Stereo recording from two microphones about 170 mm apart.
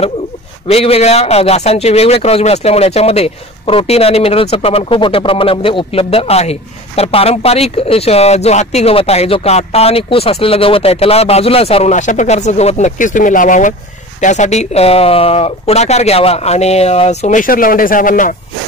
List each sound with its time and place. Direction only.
0.7 s speech: 35° left (ahead or behind); by 18.3 s 50° left (ahead or behind)